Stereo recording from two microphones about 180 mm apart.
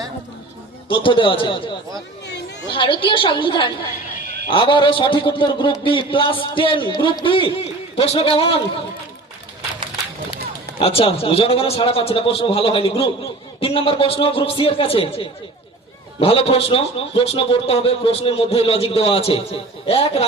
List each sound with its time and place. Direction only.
0.9 s a man's voice: 30° left (ahead or behind)
10.8 s a man's voice: 30° left (ahead or behind)